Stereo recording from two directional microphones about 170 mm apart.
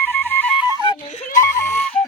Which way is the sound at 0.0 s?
10° left (ahead or behind).